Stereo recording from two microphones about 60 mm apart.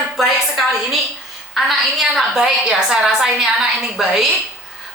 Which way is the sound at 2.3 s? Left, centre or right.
Centre.